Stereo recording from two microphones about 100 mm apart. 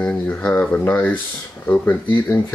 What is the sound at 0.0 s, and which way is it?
Speech, 15° left (ahead or behind).